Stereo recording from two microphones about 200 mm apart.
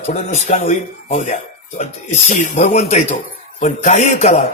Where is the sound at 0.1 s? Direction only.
35° left (ahead or behind).